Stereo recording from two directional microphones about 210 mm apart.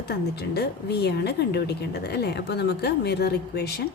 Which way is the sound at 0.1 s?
50° left (ahead or behind).